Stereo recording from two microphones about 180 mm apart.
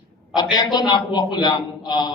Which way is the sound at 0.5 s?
25° left (ahead or behind).